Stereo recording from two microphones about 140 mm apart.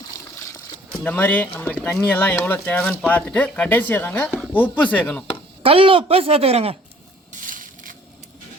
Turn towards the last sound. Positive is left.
turn(degrees=-75)  # may be behind; listen again after turning